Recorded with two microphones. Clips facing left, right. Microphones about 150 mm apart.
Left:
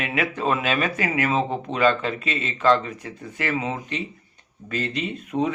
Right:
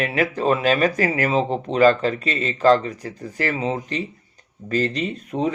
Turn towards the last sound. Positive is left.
turn(degrees=-35)  # may be behind; listen again after turning